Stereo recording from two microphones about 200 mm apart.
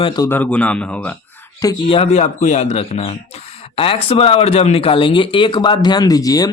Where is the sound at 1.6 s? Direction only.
25° left (ahead or behind).